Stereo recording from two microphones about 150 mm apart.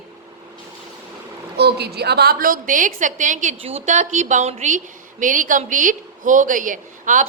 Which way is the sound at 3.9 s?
55° right (ahead or behind).